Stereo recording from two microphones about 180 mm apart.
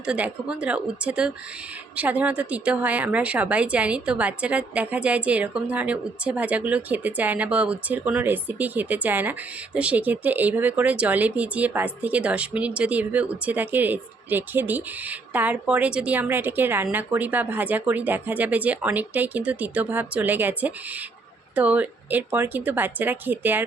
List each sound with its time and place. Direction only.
0.0 s a woman's voice: 5° right (ahead or behind)